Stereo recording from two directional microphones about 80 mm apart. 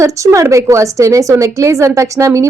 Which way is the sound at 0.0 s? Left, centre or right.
Right.